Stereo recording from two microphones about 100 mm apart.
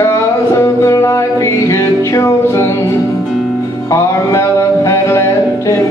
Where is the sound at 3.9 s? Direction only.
30° left (ahead or behind).